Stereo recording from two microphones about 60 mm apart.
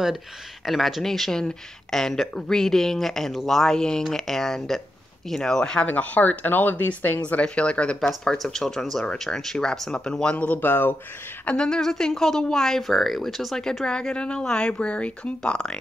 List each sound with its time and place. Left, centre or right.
0.7 s speech: centre
5.9 s speech: left
8.1 s speech: centre
10.3 s speech: left
11.4 s speech: centre